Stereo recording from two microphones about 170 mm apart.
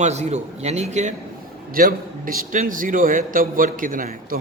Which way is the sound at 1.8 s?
55° right (ahead or behind).